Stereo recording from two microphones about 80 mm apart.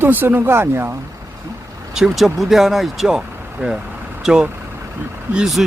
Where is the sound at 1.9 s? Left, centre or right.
Centre.